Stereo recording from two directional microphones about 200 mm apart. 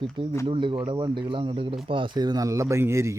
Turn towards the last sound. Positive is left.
turn(degrees=-15)  # may be behind; listen again after turning